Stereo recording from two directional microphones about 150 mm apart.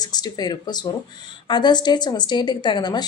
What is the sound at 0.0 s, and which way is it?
A woman's voice, 25° left (ahead or behind).